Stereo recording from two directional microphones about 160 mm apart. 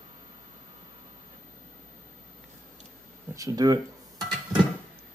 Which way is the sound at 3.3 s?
20° right (ahead or behind).